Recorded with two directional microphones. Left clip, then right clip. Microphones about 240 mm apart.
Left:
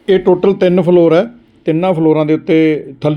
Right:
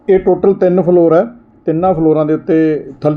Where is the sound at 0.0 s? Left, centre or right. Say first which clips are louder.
Even; left.